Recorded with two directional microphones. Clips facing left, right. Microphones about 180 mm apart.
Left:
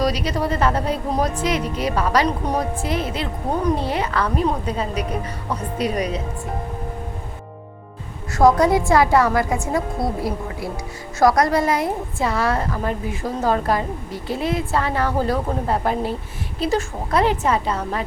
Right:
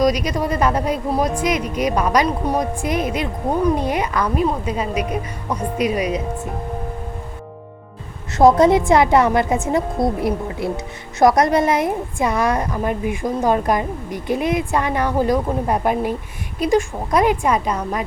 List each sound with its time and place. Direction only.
0.0 s a woman's voice: 15° right (ahead or behind)
8.4 s a woman's voice: 25° right (ahead or behind)